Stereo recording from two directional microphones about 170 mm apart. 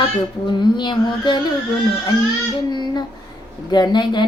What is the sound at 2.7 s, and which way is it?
Child singing, 25° left (ahead or behind).